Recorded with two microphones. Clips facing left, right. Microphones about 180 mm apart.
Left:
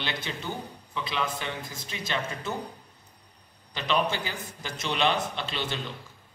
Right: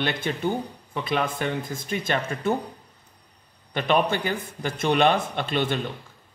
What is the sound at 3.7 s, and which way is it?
A man's voice, 55° right (ahead or behind).